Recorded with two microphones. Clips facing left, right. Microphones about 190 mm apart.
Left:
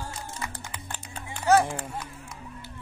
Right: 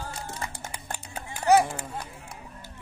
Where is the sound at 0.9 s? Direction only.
10° right (ahead or behind).